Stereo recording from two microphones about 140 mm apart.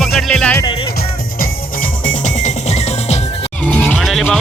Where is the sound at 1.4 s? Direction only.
80° left; by 3.2 s 50° left (ahead or behind).